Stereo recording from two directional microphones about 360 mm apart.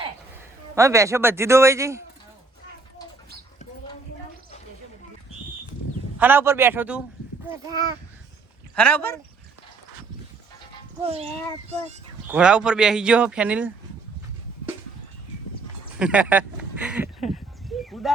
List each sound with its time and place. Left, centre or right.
0.8 s a man's voice: centre
6.1 s a man's voice: centre
8.7 s speech: centre
11.0 s a man's voice: centre
12.3 s speech: centre
16.0 s speech: centre
17.2 s a sound: centre
17.7 s a sound: centre